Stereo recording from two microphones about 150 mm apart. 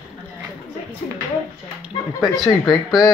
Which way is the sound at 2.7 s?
25° left (ahead or behind).